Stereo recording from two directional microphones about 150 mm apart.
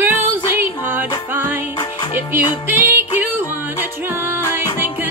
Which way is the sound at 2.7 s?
15° right (ahead or behind).